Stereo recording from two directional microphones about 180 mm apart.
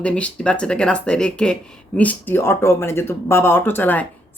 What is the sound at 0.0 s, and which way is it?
Speech, 5° left (ahead or behind).